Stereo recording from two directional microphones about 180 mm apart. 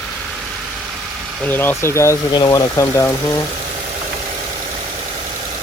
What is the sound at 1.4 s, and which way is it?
Speech, 10° left (ahead or behind).